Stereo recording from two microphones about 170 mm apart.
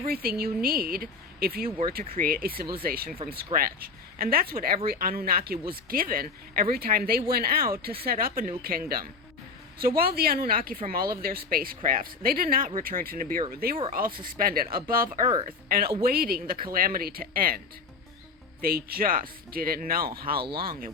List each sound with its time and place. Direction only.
0.1 s speech: 65° right (ahead or behind)
9.8 s speech: 60° right (ahead or behind)
18.6 s speech: 60° right (ahead or behind)